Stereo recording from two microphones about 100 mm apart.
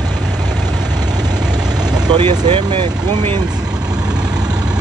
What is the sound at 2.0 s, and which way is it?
Speech, 45° right (ahead or behind).